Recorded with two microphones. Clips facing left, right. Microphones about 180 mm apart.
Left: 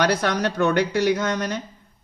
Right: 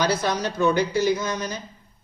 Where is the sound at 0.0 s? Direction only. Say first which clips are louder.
Left 2 dB; 65° left (ahead or behind).